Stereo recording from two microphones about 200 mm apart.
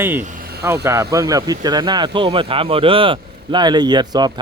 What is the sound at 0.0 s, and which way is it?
Speech, 10° right (ahead or behind).